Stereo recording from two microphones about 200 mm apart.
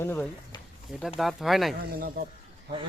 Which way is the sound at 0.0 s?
10° left (ahead or behind).